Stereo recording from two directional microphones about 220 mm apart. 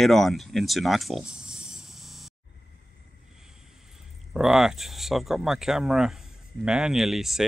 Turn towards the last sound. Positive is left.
turn(degrees=0)  # may be behind; listen again after turning